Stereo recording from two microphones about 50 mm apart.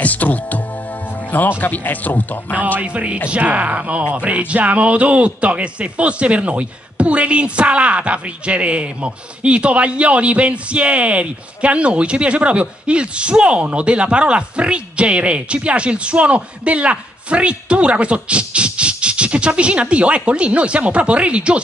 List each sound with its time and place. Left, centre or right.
0.0 s speech: left
1.6 s speech: left
2.8 s speech: right